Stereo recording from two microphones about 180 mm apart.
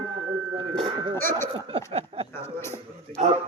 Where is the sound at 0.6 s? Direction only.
25° right (ahead or behind).